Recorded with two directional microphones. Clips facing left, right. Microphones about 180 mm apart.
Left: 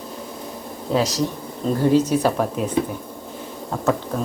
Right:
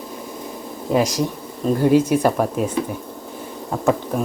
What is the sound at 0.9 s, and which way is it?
Speech, 10° right (ahead or behind).